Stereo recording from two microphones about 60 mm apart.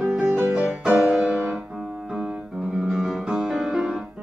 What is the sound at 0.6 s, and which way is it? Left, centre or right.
Music, centre.